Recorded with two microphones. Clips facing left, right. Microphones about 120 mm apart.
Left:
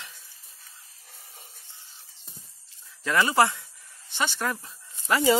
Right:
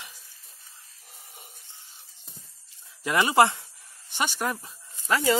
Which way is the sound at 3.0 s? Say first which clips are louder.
Right 1 dB; 15° right (ahead or behind).